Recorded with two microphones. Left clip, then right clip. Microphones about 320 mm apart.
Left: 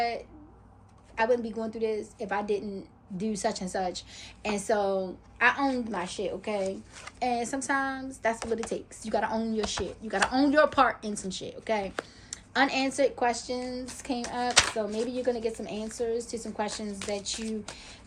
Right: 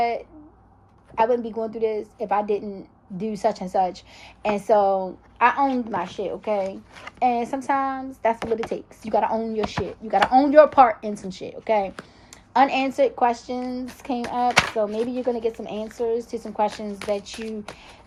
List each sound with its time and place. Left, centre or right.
1.1 s speech: centre